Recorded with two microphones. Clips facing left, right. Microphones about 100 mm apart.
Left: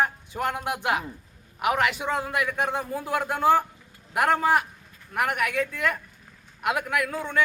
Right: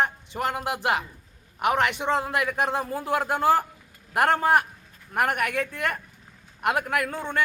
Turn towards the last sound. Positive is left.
turn(degrees=-30)  # may be behind; listen again after turning